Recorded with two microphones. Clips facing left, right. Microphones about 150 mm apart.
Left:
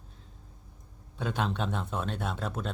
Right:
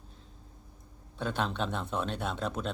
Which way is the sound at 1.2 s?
10° left (ahead or behind).